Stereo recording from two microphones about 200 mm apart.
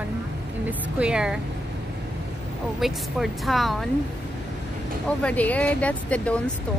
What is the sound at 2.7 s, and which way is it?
Speech, centre (ahead or behind).